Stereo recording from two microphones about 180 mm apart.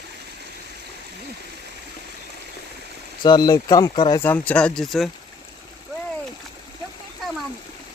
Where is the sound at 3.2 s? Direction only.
20° left (ahead or behind).